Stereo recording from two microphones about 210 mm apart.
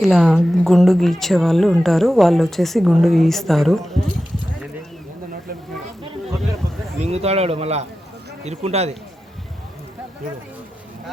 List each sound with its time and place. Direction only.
0.0 s speech: centre (ahead or behind)
7.0 s a man's voice: 30° right (ahead or behind)